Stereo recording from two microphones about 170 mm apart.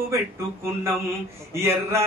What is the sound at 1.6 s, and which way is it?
Music, 15° right (ahead or behind).